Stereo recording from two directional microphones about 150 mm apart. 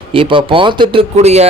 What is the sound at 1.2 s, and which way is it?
Speech, 45° right (ahead or behind).